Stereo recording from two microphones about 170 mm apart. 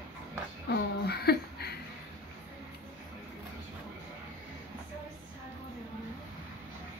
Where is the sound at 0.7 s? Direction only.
70° left (ahead or behind).